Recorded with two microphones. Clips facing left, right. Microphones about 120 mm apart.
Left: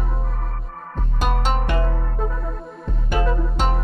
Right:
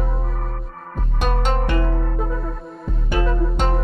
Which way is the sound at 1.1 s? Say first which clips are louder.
Right 1 dB; 5° left (ahead or behind).